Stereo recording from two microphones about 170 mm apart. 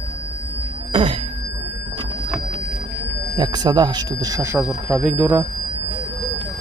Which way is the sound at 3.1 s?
25° right (ahead or behind).